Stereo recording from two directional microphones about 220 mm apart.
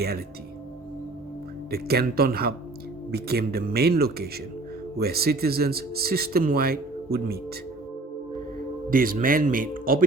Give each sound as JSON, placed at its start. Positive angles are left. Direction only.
{"t": 1.7, "sound": "speech", "side_deg": -45}
{"t": 8.9, "sound": "speech", "side_deg": -40}